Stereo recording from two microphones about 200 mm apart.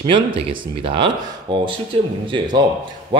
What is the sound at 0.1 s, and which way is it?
Speech, 25° right (ahead or behind).